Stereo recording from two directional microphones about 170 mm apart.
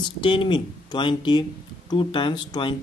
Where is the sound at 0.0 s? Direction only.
30° left (ahead or behind).